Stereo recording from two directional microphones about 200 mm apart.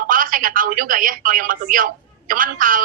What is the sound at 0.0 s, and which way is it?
A woman's voice, 45° right (ahead or behind).